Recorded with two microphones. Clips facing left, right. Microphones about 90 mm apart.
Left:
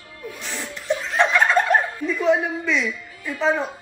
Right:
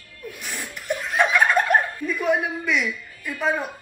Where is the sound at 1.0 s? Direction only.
10° right (ahead or behind).